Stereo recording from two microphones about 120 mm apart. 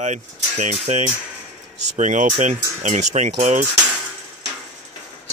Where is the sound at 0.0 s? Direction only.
80° right.